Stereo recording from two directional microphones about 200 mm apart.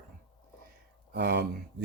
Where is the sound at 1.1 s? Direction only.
55° right (ahead or behind).